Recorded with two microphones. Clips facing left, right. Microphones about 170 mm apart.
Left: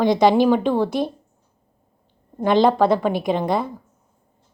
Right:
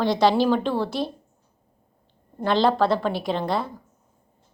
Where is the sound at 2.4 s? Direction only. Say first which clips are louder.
Left 4 dB; 15° left (ahead or behind).